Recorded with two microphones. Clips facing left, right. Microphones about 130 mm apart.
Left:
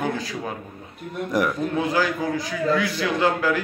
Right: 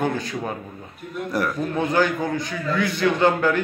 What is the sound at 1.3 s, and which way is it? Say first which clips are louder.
Speech: left 2 dB; 15° left (ahead or behind).